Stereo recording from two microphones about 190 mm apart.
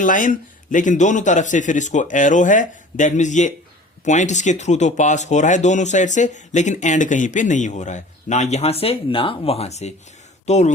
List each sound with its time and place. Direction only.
0.0 s speech: 45° left (ahead or behind)